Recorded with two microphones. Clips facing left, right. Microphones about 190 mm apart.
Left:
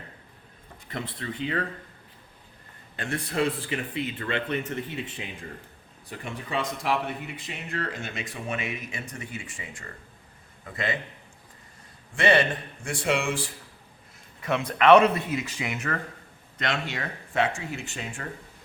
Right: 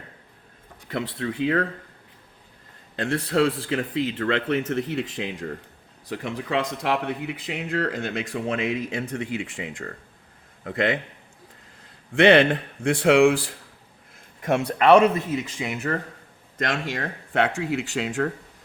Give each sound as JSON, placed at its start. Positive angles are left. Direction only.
{"t": 1.2, "sound": "speech", "side_deg": -80}
{"t": 2.9, "sound": "a man's voice", "side_deg": -80}
{"t": 12.1, "sound": "a man's voice", "side_deg": -70}
{"t": 14.8, "sound": "speech", "side_deg": -30}
{"t": 16.6, "sound": "speech", "side_deg": -45}
{"t": 16.9, "sound": "speech", "side_deg": -55}